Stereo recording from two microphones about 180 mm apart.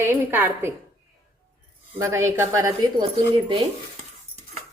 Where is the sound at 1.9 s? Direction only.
15° right (ahead or behind).